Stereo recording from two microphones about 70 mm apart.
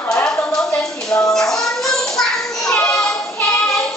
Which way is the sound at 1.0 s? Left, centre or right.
Left.